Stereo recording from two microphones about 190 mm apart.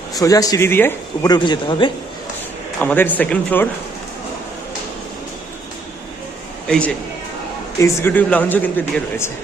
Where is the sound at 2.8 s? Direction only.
10° left (ahead or behind).